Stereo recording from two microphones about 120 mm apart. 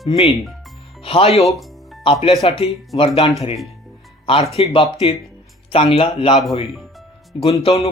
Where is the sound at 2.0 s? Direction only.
50° left (ahead or behind).